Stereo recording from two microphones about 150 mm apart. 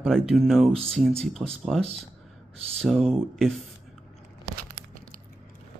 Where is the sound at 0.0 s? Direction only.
Centre (ahead or behind).